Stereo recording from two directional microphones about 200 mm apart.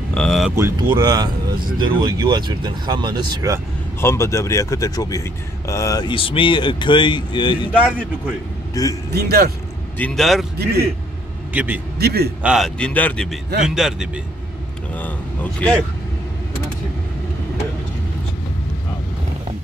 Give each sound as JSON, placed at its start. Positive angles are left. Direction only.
{"t": 0.1, "sound": "a sound", "side_deg": 5}
{"t": 0.6, "sound": "speech", "side_deg": -15}
{"t": 4.0, "sound": "speech", "side_deg": 15}
{"t": 8.8, "sound": "a man's voice", "side_deg": 15}
{"t": 9.1, "sound": "a man's voice", "side_deg": -50}
{"t": 9.9, "sound": "a man's voice", "side_deg": 5}
{"t": 10.6, "sound": "a man's voice", "side_deg": -50}
{"t": 11.5, "sound": "a man's voice", "side_deg": -10}
{"t": 12.0, "sound": "a man's voice", "side_deg": -50}
{"t": 12.4, "sound": "a man's voice", "side_deg": 0}